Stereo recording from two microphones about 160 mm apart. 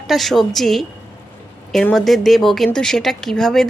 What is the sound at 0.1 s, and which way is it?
Speech, centre (ahead or behind).